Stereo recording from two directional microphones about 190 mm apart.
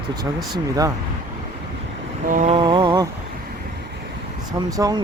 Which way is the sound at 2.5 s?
25° right (ahead or behind).